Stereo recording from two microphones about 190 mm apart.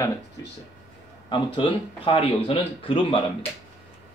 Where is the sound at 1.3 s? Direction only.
25° left (ahead or behind).